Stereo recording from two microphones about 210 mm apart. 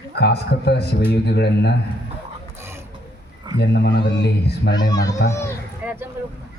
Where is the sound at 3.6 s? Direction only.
55° left (ahead or behind).